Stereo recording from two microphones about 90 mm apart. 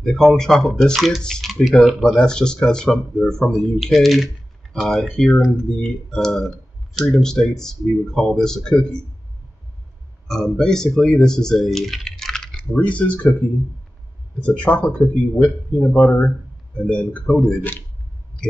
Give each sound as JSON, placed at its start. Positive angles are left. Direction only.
{"t": 0.0, "sound": "speech", "side_deg": 5}
{"t": 10.2, "sound": "speech", "side_deg": 5}
{"t": 14.4, "sound": "speech", "side_deg": 15}